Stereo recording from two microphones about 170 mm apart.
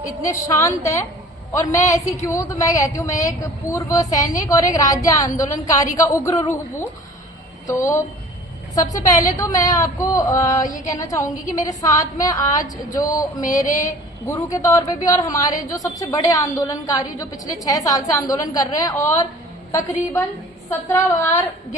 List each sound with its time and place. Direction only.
0.0 s a woman's voice: 20° left (ahead or behind)
8.7 s a woman's voice: 20° left (ahead or behind)
20.7 s a woman's voice: 15° left (ahead or behind)